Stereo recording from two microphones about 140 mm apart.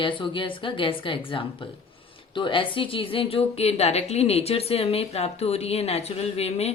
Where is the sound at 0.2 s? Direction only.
35° left (ahead or behind).